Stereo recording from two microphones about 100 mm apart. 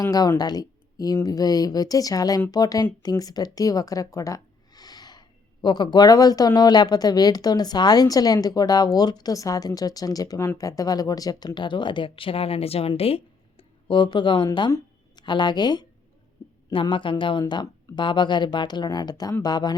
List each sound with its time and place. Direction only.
0.0 s speech: 35° left (ahead or behind); by 12.9 s 80° left
13.0 s speech: 70° left (ahead or behind); by 19.7 s 45° left (ahead or behind)